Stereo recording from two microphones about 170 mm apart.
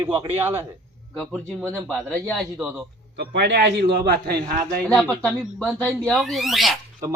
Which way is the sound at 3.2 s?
75° right (ahead or behind).